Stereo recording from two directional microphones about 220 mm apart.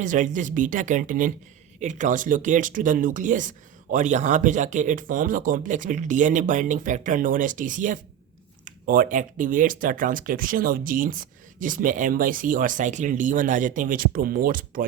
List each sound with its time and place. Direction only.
0.0 s speech: 35° right (ahead or behind)